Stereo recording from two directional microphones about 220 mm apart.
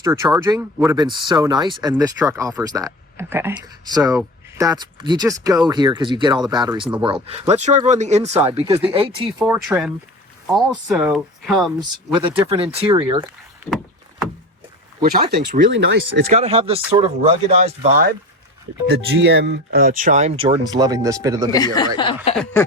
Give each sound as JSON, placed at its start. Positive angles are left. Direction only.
{"t": 0.0, "sound": "speech", "side_deg": -15}
{"t": 9.4, "sound": "speech", "side_deg": -5}
{"t": 12.5, "sound": "speech", "side_deg": -20}
{"t": 13.7, "sound": "vehicle", "side_deg": 0}
{"t": 15.3, "sound": "speech", "side_deg": -45}
{"t": 16.3, "sound": "speech", "side_deg": -25}
{"t": 18.9, "sound": "speech", "side_deg": -50}
{"t": 21.5, "sound": "speech", "side_deg": 15}